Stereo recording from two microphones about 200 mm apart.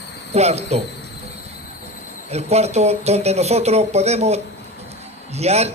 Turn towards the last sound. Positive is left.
turn(degrees=-30)  # may be behind; listen again after turning